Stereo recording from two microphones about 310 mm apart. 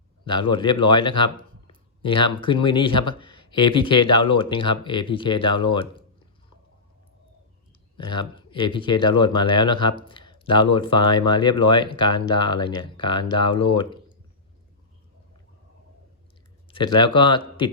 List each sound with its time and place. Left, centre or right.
0.3 s speech: centre
7.9 s speech: centre
16.6 s speech: centre